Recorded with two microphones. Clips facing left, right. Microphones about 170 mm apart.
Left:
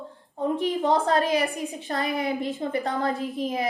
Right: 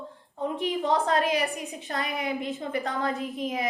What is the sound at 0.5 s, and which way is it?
A woman's voice, 35° left (ahead or behind).